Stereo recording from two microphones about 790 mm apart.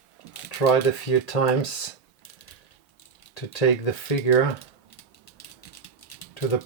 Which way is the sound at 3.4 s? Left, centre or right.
Left.